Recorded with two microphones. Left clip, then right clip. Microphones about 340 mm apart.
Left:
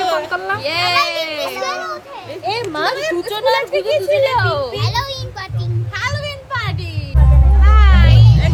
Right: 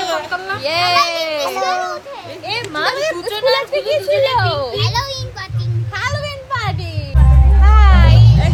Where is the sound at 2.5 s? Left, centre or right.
Left.